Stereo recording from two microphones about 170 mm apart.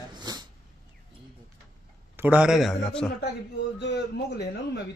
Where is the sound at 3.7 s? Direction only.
80° left.